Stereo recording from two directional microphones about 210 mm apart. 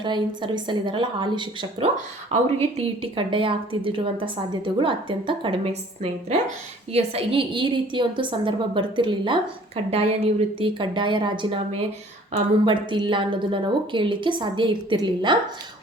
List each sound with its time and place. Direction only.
0.0 s a woman's voice: 20° right (ahead or behind)